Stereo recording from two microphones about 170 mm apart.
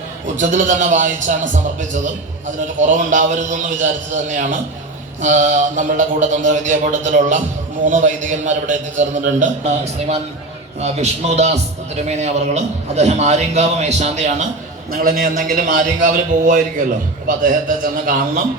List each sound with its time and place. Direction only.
0.3 s a man's voice: 45° right (ahead or behind)
14.9 s a man's voice: 60° right (ahead or behind)